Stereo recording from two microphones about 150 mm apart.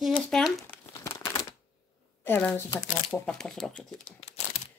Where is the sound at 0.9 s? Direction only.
20° left (ahead or behind).